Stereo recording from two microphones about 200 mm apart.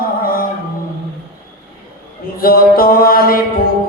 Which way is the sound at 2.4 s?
45° left (ahead or behind).